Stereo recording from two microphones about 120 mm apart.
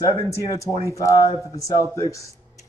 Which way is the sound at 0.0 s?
25° left (ahead or behind).